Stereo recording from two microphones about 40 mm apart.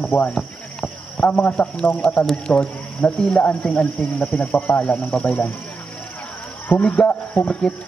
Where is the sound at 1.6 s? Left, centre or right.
Centre.